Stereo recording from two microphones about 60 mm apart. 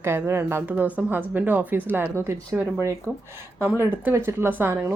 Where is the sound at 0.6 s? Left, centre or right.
Right.